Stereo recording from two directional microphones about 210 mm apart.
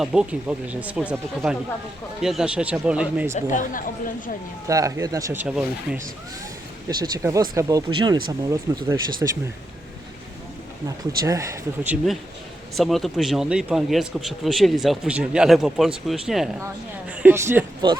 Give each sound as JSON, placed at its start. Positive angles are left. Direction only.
{"t": 0.0, "sound": "speech", "side_deg": -5}
{"t": 3.5, "sound": "speech", "side_deg": 40}
{"t": 4.7, "sound": "speech", "side_deg": -15}
{"t": 6.8, "sound": "speech", "side_deg": -15}
{"t": 10.8, "sound": "speech", "side_deg": -15}